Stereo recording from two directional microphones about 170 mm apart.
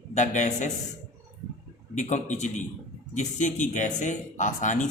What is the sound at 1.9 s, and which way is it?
A man's voice, 45° left (ahead or behind).